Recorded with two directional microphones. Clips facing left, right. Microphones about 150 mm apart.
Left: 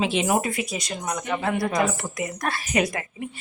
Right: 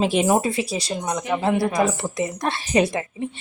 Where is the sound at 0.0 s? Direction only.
40° right (ahead or behind).